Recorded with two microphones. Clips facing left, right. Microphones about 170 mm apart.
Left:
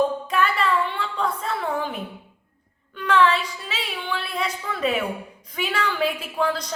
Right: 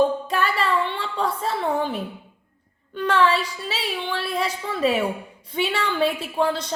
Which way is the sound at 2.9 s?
35° right (ahead or behind).